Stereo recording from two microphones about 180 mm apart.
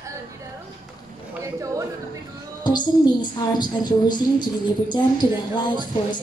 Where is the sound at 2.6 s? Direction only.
25° left (ahead or behind).